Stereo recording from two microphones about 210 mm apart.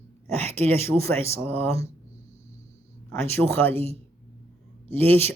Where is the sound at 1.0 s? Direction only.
10° left (ahead or behind).